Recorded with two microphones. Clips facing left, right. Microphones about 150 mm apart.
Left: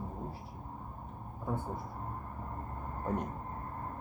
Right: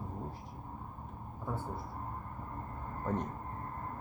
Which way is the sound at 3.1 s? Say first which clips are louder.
Even; 10° left (ahead or behind).